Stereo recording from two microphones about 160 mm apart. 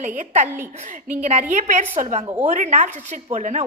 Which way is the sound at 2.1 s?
40° right (ahead or behind).